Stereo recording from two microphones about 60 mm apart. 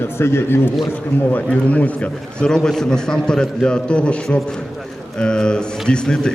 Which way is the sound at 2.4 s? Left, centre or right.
Centre.